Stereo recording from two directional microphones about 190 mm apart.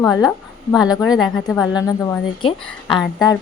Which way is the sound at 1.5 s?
20° left (ahead or behind).